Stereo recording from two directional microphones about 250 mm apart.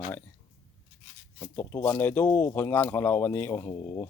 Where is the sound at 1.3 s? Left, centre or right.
Centre.